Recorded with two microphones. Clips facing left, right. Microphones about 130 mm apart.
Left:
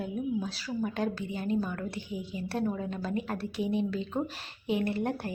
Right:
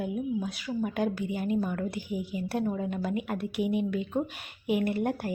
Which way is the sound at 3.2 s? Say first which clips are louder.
Right 2 dB; 30° left (ahead or behind).